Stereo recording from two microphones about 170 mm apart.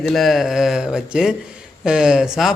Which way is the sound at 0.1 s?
Centre (ahead or behind).